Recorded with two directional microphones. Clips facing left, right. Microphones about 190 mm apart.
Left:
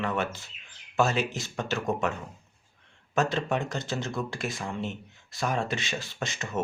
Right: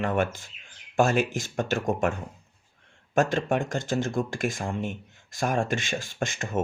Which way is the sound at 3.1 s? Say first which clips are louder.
Right 3 dB; 50° right (ahead or behind).